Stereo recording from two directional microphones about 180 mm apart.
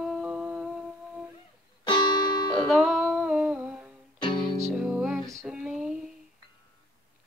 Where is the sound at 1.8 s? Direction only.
25° left (ahead or behind).